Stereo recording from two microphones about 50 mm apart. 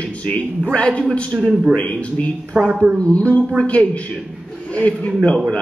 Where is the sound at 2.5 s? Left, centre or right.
Right.